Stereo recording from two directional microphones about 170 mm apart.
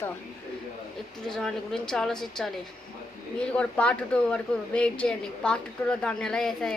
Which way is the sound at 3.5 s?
5° left (ahead or behind).